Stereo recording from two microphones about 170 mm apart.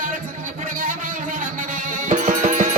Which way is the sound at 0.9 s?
50° right (ahead or behind).